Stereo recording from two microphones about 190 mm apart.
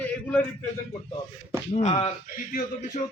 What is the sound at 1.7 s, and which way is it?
Speech, 35° left (ahead or behind).